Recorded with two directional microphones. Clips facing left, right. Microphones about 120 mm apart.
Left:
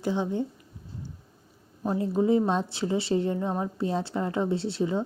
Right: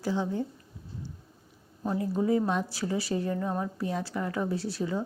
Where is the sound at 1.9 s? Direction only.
25° left (ahead or behind).